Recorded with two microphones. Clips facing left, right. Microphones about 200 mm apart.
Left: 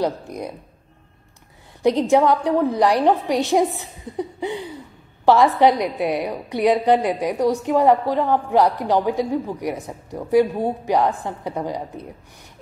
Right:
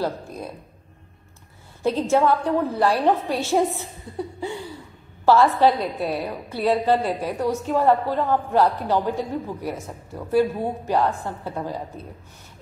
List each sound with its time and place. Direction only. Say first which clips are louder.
0.0 s a woman's voice: left 4 dB; 15° left (ahead or behind)
1.8 s a woman's voice: left 4 dB; 15° left (ahead or behind)